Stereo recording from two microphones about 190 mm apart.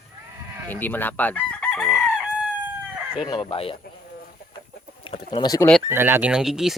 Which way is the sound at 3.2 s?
25° left (ahead or behind).